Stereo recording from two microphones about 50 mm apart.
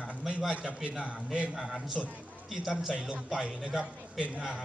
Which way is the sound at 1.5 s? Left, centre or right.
Centre.